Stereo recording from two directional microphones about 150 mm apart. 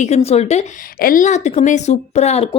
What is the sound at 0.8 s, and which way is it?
A woman's voice, 75° left (ahead or behind).